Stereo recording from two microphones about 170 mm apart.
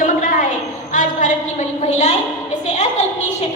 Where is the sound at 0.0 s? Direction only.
55° left (ahead or behind).